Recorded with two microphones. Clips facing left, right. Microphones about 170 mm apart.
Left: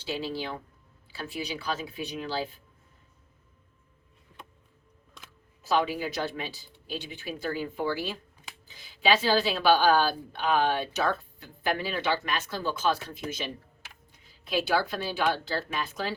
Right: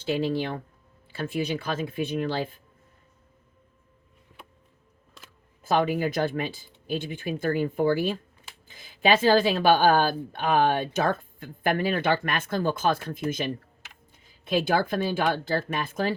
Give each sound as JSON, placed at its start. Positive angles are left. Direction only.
{"t": 0.0, "sound": "speech", "side_deg": -50}
{"t": 5.6, "sound": "speech", "side_deg": -50}